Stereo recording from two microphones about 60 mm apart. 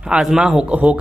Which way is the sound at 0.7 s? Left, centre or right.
Right.